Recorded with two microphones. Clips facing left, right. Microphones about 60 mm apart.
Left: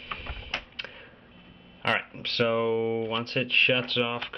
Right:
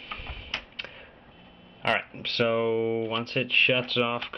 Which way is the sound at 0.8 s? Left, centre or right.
Left.